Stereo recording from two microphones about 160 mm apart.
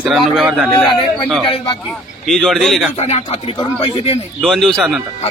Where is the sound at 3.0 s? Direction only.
45° left (ahead or behind).